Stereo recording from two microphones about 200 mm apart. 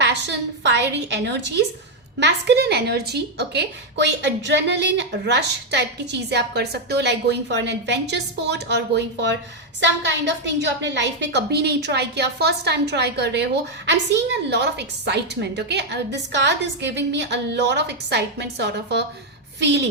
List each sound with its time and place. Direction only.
0.0 s a woman's voice: 60° right (ahead or behind)